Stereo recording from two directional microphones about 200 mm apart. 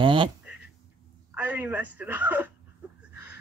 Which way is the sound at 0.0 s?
25° right (ahead or behind).